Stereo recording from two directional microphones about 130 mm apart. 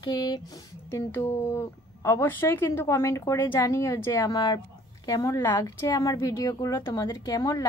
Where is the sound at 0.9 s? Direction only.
20° left (ahead or behind).